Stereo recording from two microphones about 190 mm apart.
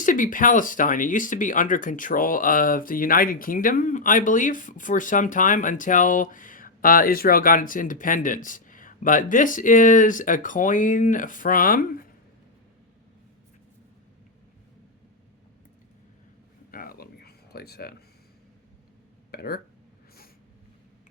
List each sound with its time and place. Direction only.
0.0 s speech: 45° left (ahead or behind)
16.7 s a sound: 50° left (ahead or behind)
19.3 s speech: 55° left (ahead or behind)